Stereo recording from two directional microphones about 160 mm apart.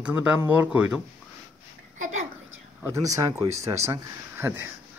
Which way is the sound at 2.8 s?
20° right (ahead or behind).